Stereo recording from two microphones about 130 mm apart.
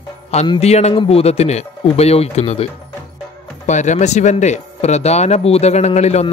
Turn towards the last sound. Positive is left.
turn(degrees=55)  # may be behind; listen again after turning